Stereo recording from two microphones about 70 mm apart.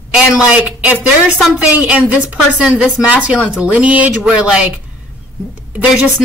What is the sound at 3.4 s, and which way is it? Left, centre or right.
Speech, centre.